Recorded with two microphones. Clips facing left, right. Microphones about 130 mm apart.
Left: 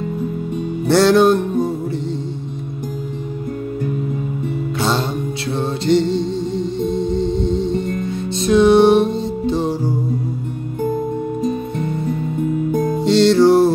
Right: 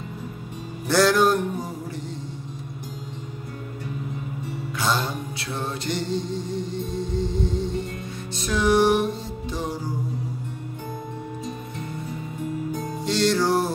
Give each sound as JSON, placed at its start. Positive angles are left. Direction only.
{"t": 0.8, "sound": "music", "side_deg": 25}
{"t": 4.7, "sound": "music", "side_deg": 25}
{"t": 11.4, "sound": "music", "side_deg": 60}
{"t": 12.7, "sound": "music", "side_deg": 50}
{"t": 13.0, "sound": "music", "side_deg": 25}